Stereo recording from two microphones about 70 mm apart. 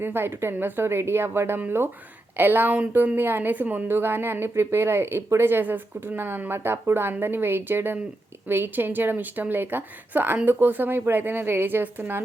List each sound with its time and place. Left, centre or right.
0.0 s a woman's voice: right